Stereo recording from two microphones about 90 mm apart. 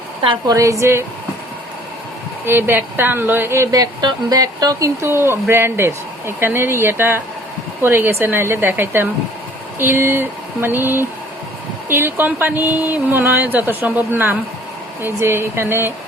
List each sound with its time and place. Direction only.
0.2 s a woman's voice: 60° right (ahead or behind)
0.5 s a woman's voice: 35° right (ahead or behind)
2.5 s speech: 25° right (ahead or behind)
3.7 s speech: 45° right (ahead or behind); by 15.9 s 25° right (ahead or behind)